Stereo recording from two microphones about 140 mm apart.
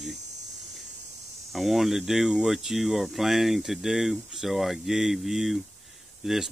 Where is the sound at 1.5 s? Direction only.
Centre (ahead or behind).